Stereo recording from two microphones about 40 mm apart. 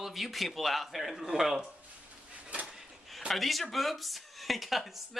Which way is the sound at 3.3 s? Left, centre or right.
Centre.